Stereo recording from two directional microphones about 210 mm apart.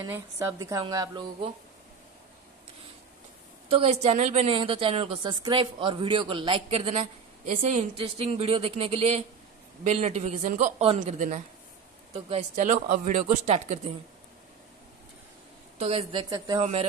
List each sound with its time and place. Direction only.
0.0 s a woman's voice: 15° right (ahead or behind)
3.7 s speech: 30° right (ahead or behind)
15.8 s speech: 25° right (ahead or behind)